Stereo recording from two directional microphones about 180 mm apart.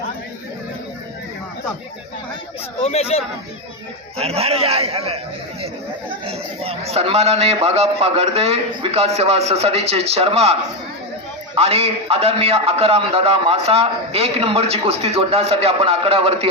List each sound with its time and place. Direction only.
2.8 s speech: 35° left (ahead or behind)
4.2 s speech: 35° right (ahead or behind)